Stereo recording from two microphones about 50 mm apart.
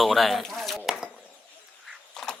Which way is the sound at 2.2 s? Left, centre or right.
Centre.